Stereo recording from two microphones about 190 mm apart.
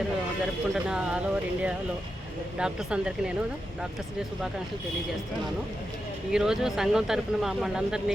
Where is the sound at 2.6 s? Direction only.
5° right (ahead or behind).